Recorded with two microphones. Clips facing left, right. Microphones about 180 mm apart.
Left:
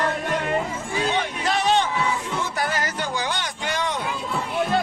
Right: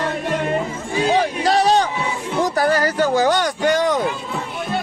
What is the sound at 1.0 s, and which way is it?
Music, 35° right (ahead or behind).